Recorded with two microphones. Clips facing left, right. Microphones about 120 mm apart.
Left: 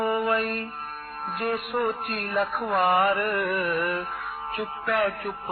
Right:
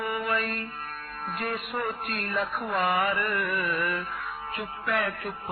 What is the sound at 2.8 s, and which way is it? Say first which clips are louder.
Speech: left 5 dB; 35° left (ahead or behind).